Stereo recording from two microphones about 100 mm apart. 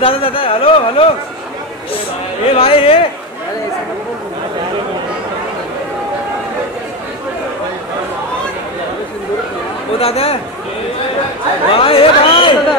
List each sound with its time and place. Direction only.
0.0 s speech: 65° left (ahead or behind)
2.5 s a man's voice: 75° left (ahead or behind)
9.9 s a man's voice: 80° left
11.7 s speech: 70° left (ahead or behind)